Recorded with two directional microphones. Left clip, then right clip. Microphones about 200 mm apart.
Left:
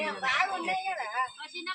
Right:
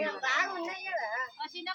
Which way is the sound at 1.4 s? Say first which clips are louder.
Even; 40° right (ahead or behind).